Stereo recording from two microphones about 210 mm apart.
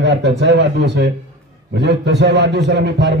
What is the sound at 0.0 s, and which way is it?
A man's voice, 55° right (ahead or behind).